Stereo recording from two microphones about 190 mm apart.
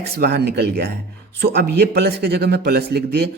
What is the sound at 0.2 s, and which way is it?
A man's voice, 60° right (ahead or behind).